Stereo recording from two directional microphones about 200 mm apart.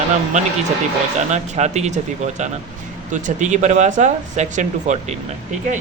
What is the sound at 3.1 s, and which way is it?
Speech, 35° right (ahead or behind).